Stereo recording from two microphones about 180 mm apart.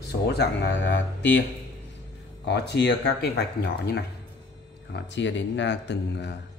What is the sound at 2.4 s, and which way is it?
Speech, 70° left (ahead or behind).